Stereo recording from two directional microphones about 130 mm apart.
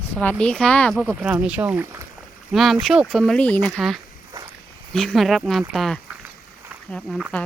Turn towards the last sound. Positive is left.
turn(degrees=10)  # may be behind; listen again after turning